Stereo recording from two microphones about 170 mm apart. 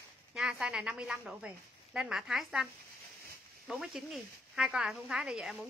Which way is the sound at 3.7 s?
Centre (ahead or behind).